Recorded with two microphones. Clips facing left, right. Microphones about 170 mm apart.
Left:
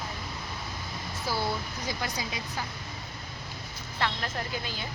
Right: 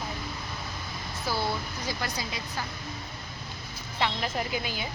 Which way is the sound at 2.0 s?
15° left (ahead or behind).